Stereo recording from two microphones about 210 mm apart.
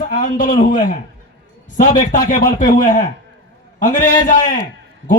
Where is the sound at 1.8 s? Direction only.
40° left (ahead or behind).